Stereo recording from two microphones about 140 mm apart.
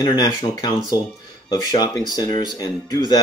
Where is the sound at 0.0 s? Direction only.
30° left (ahead or behind).